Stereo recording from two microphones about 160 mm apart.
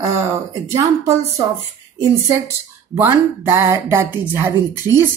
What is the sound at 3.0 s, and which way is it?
Speech, 15° right (ahead or behind).